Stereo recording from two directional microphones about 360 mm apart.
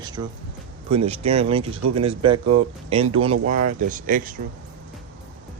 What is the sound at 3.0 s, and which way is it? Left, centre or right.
Speech, right.